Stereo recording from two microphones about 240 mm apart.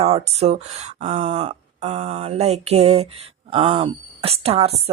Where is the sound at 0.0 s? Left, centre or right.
Right.